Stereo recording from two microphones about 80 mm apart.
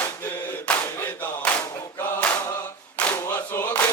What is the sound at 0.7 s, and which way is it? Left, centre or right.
Clapping, left.